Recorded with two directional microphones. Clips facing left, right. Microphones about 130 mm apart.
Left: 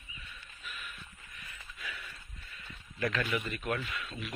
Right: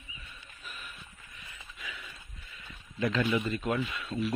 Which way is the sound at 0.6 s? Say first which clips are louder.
Even; 40° right (ahead or behind).